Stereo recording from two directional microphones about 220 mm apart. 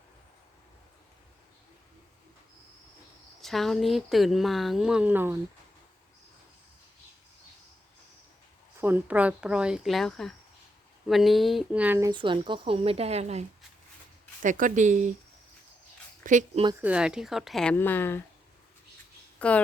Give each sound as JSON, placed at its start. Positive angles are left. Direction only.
{"t": 3.4, "sound": "speech", "side_deg": 0}
{"t": 8.8, "sound": "speech", "side_deg": -10}
{"t": 14.4, "sound": "speech", "side_deg": -35}
{"t": 16.2, "sound": "speech", "side_deg": -35}
{"t": 16.8, "sound": "speech", "side_deg": -5}
{"t": 19.4, "sound": "a woman's voice", "side_deg": 5}